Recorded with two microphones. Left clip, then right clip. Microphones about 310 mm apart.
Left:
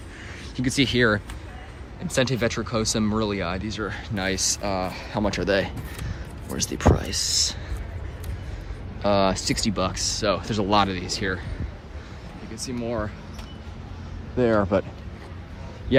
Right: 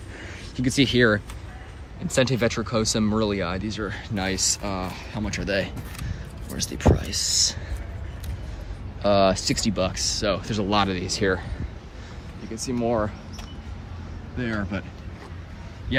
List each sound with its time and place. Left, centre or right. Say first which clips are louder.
0.5 s speech: right 1 dB; centre
9.0 s speech: right 2 dB; centre
12.5 s speech: right 5 dB; centre